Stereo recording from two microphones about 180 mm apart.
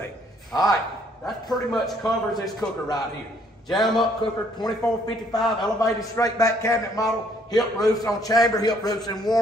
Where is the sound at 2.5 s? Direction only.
20° left (ahead or behind).